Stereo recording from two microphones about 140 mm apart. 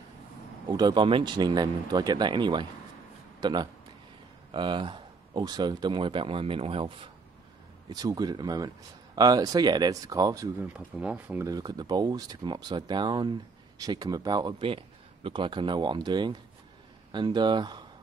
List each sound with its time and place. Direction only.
0.7 s speech: 30° right (ahead or behind)
7.9 s speech: 25° right (ahead or behind)
10.6 s speech: 10° right (ahead or behind)
11.4 s speech: 25° right (ahead or behind)